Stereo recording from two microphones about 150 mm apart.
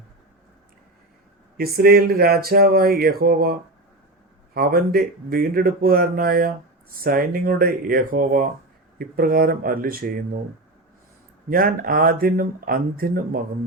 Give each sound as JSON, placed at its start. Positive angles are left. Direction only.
{"t": 1.5, "sound": "speech", "side_deg": -90}
{"t": 11.4, "sound": "speech", "side_deg": -75}